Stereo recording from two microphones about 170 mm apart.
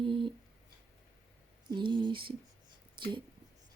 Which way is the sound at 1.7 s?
30° right (ahead or behind).